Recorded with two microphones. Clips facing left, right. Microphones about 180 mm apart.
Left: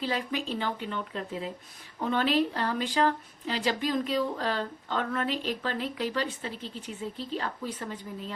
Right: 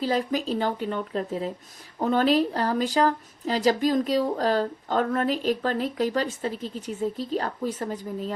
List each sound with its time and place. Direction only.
0.0 s speech: 40° right (ahead or behind)